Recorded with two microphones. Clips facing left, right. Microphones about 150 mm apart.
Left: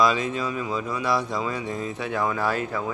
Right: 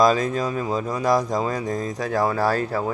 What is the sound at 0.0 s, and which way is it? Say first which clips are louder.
A man's voice: right 4 dB; 40° right (ahead or behind).